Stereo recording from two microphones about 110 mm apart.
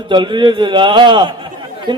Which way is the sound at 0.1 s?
45° right (ahead or behind).